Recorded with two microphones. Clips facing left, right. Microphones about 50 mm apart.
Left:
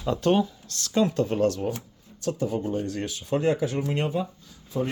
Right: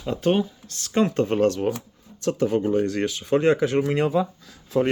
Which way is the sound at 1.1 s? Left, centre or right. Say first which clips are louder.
Right 3 dB; right.